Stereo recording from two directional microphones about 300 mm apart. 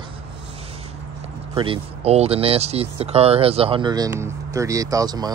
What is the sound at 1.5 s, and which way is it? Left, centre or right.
Speech, centre.